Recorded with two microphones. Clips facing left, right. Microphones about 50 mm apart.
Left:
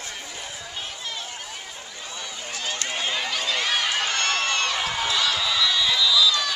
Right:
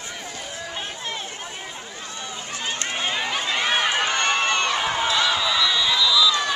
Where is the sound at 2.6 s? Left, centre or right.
Right.